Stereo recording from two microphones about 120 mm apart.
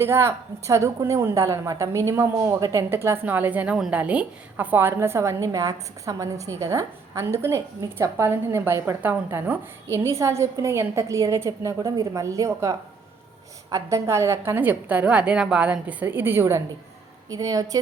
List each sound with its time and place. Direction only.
0.0 s a woman's voice: 20° right (ahead or behind)